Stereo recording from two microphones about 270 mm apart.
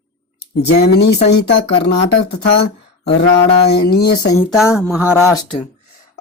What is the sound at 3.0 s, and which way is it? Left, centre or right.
Mantra, left.